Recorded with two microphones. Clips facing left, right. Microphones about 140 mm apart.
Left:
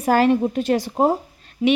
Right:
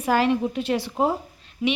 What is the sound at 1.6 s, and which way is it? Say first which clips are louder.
Speech: left 6 dB; 30° left (ahead or behind).